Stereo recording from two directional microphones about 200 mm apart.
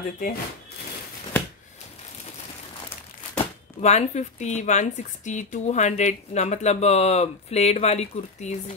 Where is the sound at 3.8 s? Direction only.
35° left (ahead or behind).